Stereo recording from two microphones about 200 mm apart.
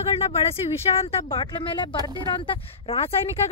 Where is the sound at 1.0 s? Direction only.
25° left (ahead or behind).